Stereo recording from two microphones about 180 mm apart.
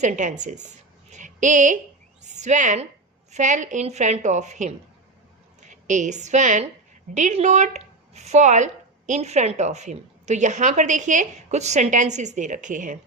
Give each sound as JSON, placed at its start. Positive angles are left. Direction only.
{"t": 0.0, "sound": "a woman's voice", "side_deg": -40}